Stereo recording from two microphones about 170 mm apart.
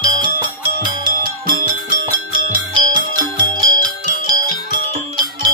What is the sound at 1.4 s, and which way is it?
Music, 55° right (ahead or behind).